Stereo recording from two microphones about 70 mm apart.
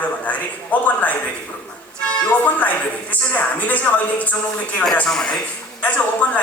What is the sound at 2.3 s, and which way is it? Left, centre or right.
A man's voice, left.